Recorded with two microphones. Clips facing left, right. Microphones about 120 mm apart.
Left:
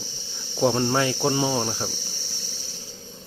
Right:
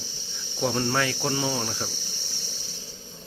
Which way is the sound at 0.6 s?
30° left (ahead or behind).